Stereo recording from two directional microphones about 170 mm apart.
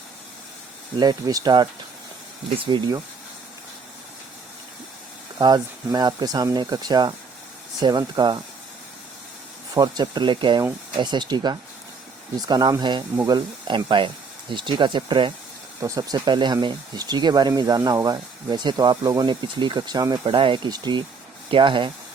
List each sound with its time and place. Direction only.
0.9 s speech: 20° right (ahead or behind)
5.4 s speech: 25° right (ahead or behind)
9.7 s speech: 25° right (ahead or behind)
10.6 s speech: 15° right (ahead or behind)
11.0 s speech: 25° right (ahead or behind)